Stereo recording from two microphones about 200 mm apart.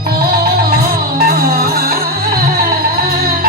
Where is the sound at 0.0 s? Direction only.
50° right (ahead or behind).